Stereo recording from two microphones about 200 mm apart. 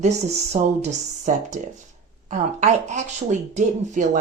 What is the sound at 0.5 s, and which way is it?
Speech, 35° right (ahead or behind).